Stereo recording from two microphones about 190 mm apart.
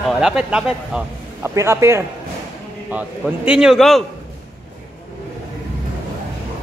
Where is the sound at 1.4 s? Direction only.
15° right (ahead or behind).